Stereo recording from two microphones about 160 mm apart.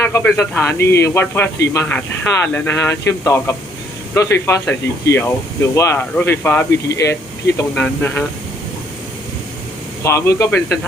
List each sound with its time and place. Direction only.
0.0 s speech: 15° left (ahead or behind)
10.0 s speech: 20° left (ahead or behind)